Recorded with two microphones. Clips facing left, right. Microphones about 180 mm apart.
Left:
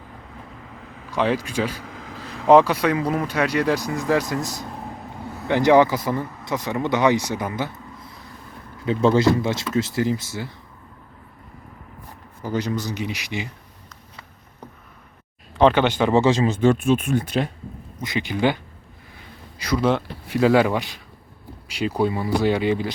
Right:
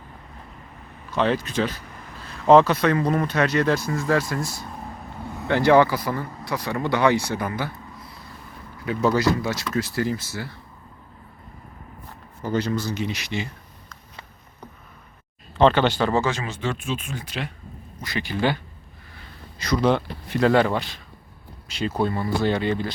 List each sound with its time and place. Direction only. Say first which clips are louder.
1.1 s speech: even; 10° left (ahead or behind)
1.8 s a sound: left 5 dB; 90° left
2.5 s speech: even; 10° left (ahead or behind)
8.8 s speech: left 4 dB; 25° left (ahead or behind)
12.4 s speech: right 1 dB; 15° left (ahead or behind)
15.5 s speech: left 1 dB; 15° left (ahead or behind)
16.2 s speech: left 8 dB; 30° left (ahead or behind)
16.6 s speech: left 10 dB; 50° left (ahead or behind)
18.0 s speech: left 3 dB; 20° left (ahead or behind)
19.5 s speech: even; 10° left (ahead or behind)